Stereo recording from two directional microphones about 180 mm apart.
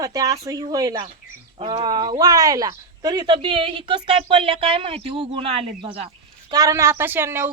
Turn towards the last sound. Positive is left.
turn(degrees=-15)  # may be behind; listen again after turning